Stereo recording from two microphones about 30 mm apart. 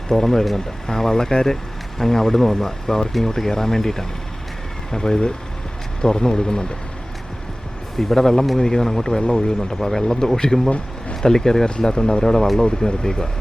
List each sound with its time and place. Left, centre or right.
0.1 s speech: centre
7.9 s speech: centre